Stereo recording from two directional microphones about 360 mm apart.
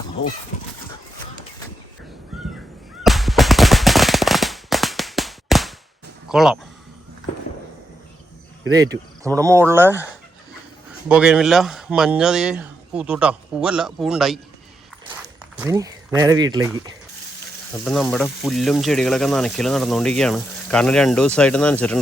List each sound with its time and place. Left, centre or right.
2.3 s crow: centre
3.0 s a sound: centre
6.2 s speech: centre
8.7 s speech: centre
11.1 s speech: centre
15.5 s speech: centre